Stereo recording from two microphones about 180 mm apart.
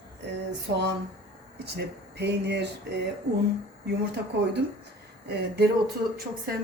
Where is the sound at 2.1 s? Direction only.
70° right (ahead or behind).